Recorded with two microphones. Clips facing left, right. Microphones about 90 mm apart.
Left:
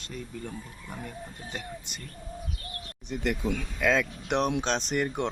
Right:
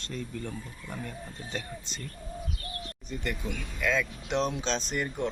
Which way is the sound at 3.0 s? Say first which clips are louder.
Left 6 dB; 80° left.